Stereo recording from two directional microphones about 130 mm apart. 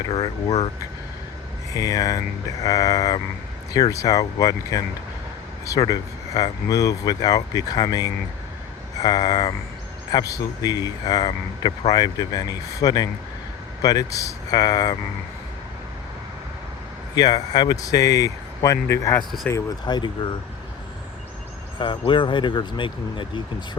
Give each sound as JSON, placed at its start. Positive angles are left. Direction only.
{"t": 0.1, "sound": "speech", "side_deg": 40}
{"t": 1.7, "sound": "speech", "side_deg": 30}
{"t": 17.2, "sound": "speech", "side_deg": 30}
{"t": 19.8, "sound": "speech", "side_deg": 35}
{"t": 21.8, "sound": "speech", "side_deg": 40}